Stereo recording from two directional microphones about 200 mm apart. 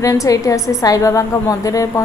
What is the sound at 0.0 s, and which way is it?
A woman's voice, 15° left (ahead or behind).